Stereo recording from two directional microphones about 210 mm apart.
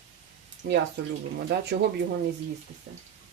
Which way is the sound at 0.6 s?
50° right (ahead or behind).